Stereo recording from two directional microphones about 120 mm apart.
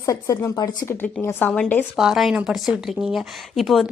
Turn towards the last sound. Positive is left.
turn(degrees=0)  # may be behind; listen again after turning